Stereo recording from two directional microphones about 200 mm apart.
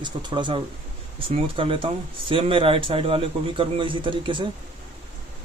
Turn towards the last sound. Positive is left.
turn(degrees=-25)  # may be behind; listen again after turning